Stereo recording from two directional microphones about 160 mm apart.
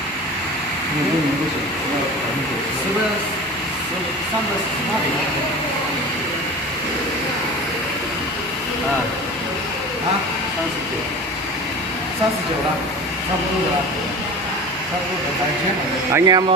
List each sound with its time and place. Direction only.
16.1 s speech: 25° right (ahead or behind)